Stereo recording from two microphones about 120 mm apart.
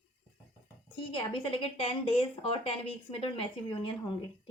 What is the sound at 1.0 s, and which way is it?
Speech, 45° left (ahead or behind).